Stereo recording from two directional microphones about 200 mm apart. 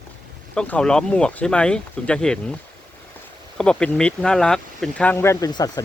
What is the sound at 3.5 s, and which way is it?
Speech, 5° left (ahead or behind).